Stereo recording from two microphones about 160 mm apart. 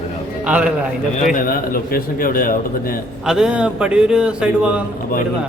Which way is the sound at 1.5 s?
65° left (ahead or behind).